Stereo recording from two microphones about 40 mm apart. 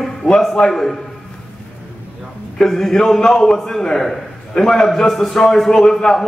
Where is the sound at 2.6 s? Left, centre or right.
Centre.